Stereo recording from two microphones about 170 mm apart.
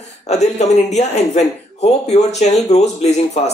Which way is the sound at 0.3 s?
40° left (ahead or behind).